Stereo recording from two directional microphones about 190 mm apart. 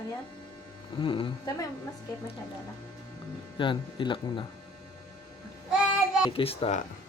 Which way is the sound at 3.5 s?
25° left (ahead or behind).